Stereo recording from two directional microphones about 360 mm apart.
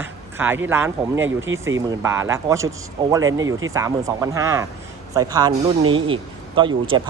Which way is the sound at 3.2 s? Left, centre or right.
Right.